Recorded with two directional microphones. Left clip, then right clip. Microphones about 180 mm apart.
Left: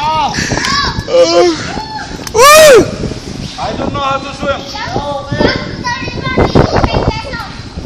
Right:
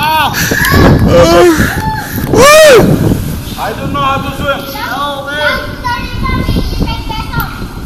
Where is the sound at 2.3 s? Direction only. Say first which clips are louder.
Even; 10° left (ahead or behind).